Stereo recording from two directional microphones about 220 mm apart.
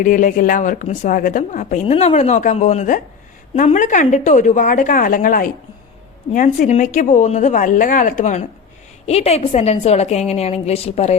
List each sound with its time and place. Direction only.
0.0 s a woman's voice: 35° left (ahead or behind)